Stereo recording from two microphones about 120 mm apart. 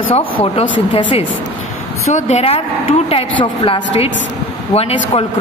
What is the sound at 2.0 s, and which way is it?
Speech, 70° left (ahead or behind).